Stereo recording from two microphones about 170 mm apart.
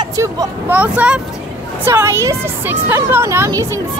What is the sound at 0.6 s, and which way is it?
Speech, 10° right (ahead or behind).